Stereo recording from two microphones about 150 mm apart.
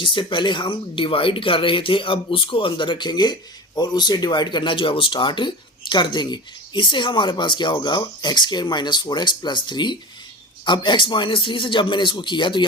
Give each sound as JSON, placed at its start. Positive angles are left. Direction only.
{"t": 0.0, "sound": "speech", "side_deg": 35}